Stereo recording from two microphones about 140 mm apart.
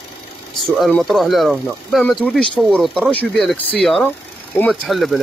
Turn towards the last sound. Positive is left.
turn(degrees=0)  # may be behind; listen again after turning